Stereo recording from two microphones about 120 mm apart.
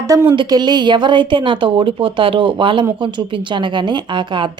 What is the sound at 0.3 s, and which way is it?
A woman's voice, 40° right (ahead or behind).